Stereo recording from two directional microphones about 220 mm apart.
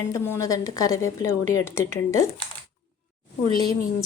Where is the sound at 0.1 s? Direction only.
15° left (ahead or behind).